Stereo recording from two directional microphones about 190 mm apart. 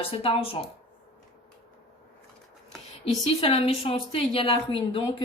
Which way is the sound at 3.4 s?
30° left (ahead or behind).